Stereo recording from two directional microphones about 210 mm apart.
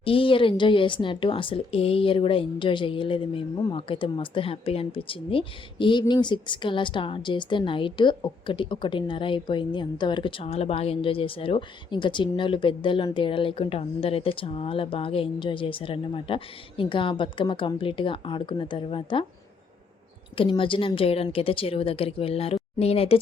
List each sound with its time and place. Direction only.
0.0 s speech: 25° left (ahead or behind)
20.3 s speech: 25° left (ahead or behind)